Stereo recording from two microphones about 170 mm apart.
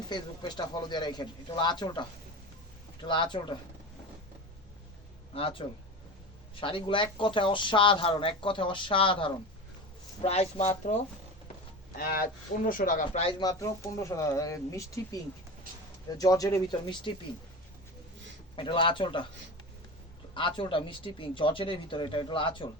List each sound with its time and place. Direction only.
0.1 s speech: 25° left (ahead or behind)
5.3 s speech: 35° left (ahead or behind)
11.9 s speech: 65° left (ahead or behind)
13.4 s speech: 20° left (ahead or behind)
18.5 s speech: 30° left (ahead or behind)
20.3 s speech: 30° left (ahead or behind)